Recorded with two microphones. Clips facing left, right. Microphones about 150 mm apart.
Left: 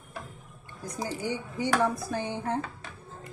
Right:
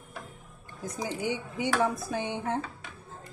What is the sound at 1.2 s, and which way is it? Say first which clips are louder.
A woman's voice: right 1 dB; 20° right (ahead or behind).